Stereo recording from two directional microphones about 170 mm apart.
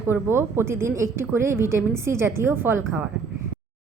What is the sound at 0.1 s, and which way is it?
A woman's voice, 15° right (ahead or behind).